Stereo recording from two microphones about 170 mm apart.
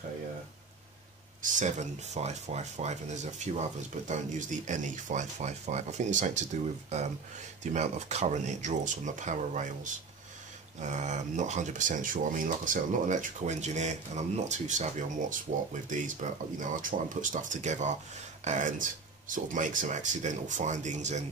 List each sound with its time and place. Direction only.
1.4 s speech: 45° right (ahead or behind)
10.8 s speech: 45° right (ahead or behind)